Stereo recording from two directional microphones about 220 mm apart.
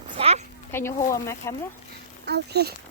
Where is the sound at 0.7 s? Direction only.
10° left (ahead or behind).